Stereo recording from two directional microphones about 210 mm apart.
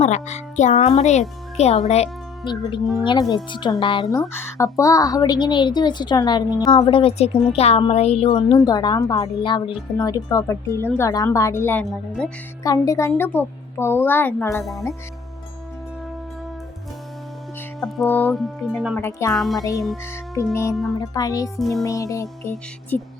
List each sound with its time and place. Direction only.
0.0 s a child's voice: 30° left (ahead or behind); by 12.3 s 5° left (ahead or behind)
12.6 s a woman's voice: 15° left (ahead or behind)
14.6 s speech: centre (ahead or behind)
17.7 s speech: centre (ahead or behind)
18.9 s a woman's voice: 15° left (ahead or behind)
19.3 s speech: centre (ahead or behind)
20.3 s a woman's voice: 15° left (ahead or behind)
21.5 s speech: centre (ahead or behind)
21.8 s a woman's voice: 15° left (ahead or behind)